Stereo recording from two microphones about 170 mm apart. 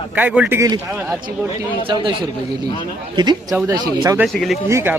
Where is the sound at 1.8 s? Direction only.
30° right (ahead or behind).